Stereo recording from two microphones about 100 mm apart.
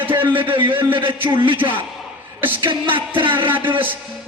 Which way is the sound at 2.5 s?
60° right (ahead or behind).